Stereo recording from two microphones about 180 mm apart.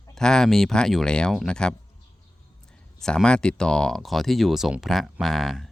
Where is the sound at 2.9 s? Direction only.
5° left (ahead or behind).